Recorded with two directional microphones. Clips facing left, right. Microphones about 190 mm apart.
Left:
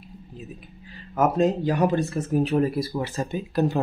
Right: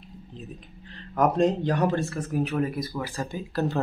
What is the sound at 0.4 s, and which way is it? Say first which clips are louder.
Speech: left 1 dB; 5° left (ahead or behind).